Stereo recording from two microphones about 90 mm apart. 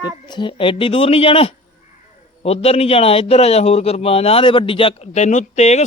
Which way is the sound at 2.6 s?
90° left.